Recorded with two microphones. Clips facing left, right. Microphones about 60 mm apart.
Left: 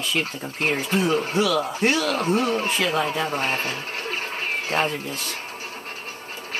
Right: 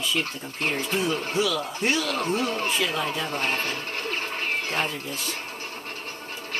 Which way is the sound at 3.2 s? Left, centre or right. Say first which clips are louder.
Left 3 dB; centre.